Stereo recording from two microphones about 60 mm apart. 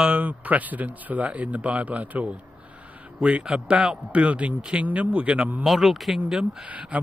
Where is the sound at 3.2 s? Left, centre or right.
Centre.